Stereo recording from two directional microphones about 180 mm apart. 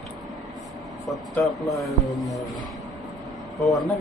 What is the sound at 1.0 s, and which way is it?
A man's voice, centre (ahead or behind).